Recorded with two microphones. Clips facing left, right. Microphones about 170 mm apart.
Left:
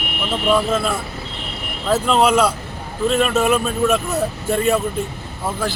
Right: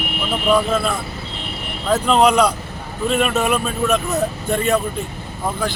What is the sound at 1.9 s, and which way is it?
A man's voice, centre (ahead or behind).